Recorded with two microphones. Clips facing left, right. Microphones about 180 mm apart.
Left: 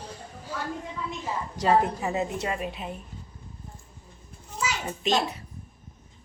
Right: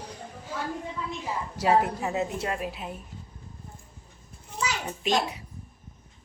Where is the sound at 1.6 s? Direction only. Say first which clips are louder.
Left 1 dB; 10° right (ahead or behind).